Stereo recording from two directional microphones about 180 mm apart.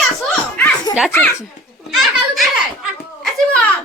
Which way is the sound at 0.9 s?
20° left (ahead or behind).